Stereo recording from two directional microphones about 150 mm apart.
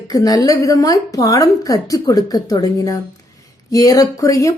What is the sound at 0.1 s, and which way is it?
A woman's voice, 25° left (ahead or behind).